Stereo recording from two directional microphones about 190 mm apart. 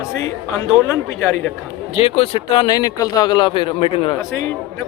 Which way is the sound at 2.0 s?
30° left (ahead or behind).